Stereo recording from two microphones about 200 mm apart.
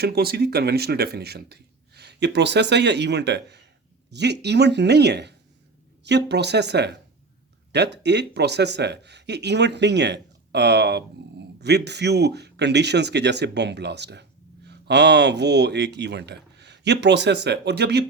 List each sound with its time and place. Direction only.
0.0 s speech: 50° right (ahead or behind)